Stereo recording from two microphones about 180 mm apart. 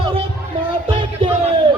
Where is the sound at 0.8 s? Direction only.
30° right (ahead or behind).